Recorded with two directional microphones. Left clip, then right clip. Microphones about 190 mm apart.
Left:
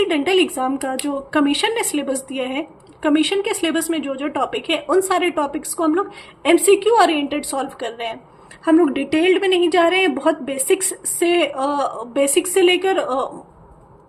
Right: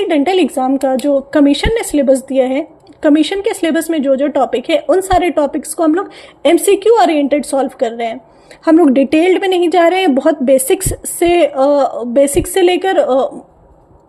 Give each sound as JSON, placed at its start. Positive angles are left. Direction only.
{"t": 0.1, "sound": "a woman's voice", "side_deg": -25}